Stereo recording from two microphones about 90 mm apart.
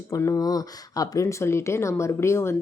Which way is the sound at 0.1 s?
40° left (ahead or behind).